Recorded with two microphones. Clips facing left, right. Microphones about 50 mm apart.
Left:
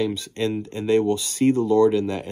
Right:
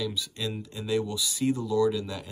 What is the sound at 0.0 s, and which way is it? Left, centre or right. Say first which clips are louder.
Speech: left 8 dB; left.